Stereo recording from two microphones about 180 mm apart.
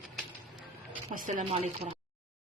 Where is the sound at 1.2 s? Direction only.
45° right (ahead or behind).